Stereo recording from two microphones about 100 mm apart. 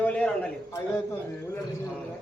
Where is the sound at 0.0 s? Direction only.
15° left (ahead or behind).